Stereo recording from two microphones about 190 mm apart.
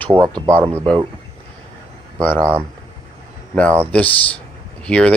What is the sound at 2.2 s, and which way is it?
Speech, 5° left (ahead or behind).